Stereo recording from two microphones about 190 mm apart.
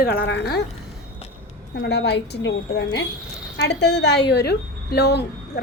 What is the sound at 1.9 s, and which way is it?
A woman's voice, 65° left (ahead or behind).